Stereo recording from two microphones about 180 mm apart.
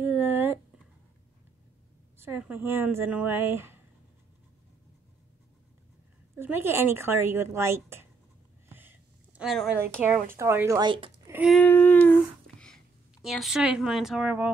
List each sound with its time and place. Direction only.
0.0 s a sound: 10° right (ahead or behind)
2.1 s a woman's voice: 10° right (ahead or behind)
6.3 s a woman's voice: 15° right (ahead or behind)
8.6 s a sound: 10° right (ahead or behind)
10.0 s a woman's voice: 5° right (ahead or behind)
10.8 s speech: 25° right (ahead or behind)
11.5 s speech: 10° left (ahead or behind); by 14.5 s 5° right (ahead or behind)